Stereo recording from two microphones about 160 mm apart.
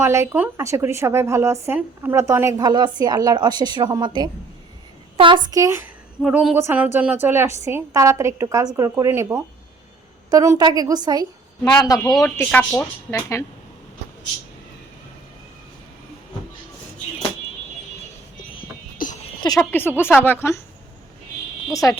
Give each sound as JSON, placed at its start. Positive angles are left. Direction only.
{"t": 0.0, "sound": "speech", "side_deg": -15}
{"t": 6.2, "sound": "a woman's voice", "side_deg": -5}
{"t": 11.6, "sound": "a man's voice", "side_deg": 25}
{"t": 12.2, "sound": "speech", "side_deg": 15}
{"t": 19.0, "sound": "a sound", "side_deg": 60}
{"t": 19.4, "sound": "speech", "side_deg": 25}
{"t": 20.0, "sound": "speech", "side_deg": 10}
{"t": 21.7, "sound": "a man's voice", "side_deg": 20}